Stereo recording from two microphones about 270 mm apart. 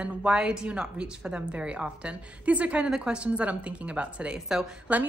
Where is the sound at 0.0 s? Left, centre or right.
Centre.